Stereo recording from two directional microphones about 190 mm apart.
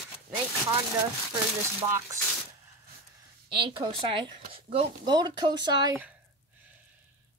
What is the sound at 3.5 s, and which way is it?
Speech, 25° right (ahead or behind).